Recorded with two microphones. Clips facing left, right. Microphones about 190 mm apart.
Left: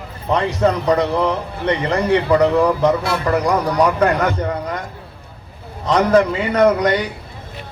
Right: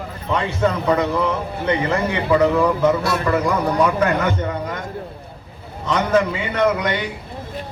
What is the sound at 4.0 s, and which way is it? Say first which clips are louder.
Speech: left 2 dB; 35° left (ahead or behind).